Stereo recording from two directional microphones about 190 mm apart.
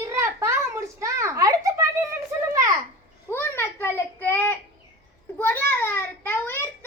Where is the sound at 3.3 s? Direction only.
10° left (ahead or behind).